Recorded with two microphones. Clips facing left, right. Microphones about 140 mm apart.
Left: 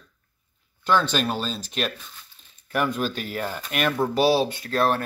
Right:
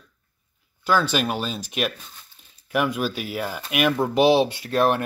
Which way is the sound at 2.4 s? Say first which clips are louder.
Right 1 dB; 10° right (ahead or behind).